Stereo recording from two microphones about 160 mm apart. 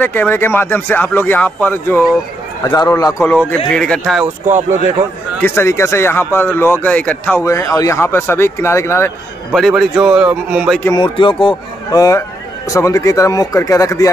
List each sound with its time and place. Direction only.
0.0 s speech: 10° left (ahead or behind)
2.6 s speech: 20° left (ahead or behind)
3.4 s speech: 5° left (ahead or behind)
4.5 s speech: 50° right (ahead or behind)
5.4 s speech: 15° left (ahead or behind)
9.5 s a man's voice: centre (ahead or behind)
11.0 s speech: 30° left (ahead or behind)